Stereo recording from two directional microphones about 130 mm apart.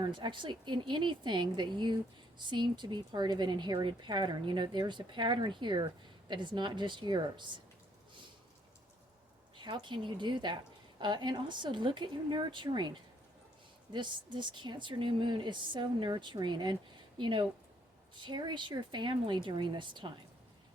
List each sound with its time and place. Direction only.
0.0 s a woman's voice: 35° right (ahead or behind)
9.6 s a woman's voice: 35° right (ahead or behind)